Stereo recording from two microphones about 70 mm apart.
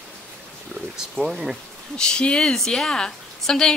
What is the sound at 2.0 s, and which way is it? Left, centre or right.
A woman's voice, centre.